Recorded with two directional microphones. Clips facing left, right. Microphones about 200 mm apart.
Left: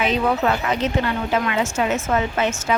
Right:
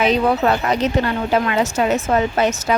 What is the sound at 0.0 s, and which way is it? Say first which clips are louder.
A woman's voice: right 4 dB; 40° right (ahead or behind).